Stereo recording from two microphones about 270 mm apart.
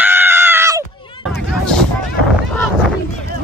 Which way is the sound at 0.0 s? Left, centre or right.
Centre.